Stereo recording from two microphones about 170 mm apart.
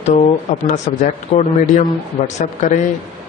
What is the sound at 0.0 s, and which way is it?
Speech, 40° left (ahead or behind).